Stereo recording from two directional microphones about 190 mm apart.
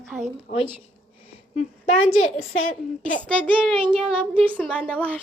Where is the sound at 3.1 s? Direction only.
5° left (ahead or behind).